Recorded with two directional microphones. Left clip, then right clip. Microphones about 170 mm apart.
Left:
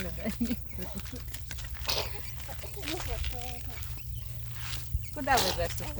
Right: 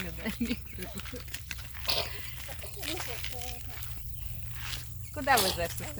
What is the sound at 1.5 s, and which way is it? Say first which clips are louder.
Biting: even; 20° right (ahead or behind).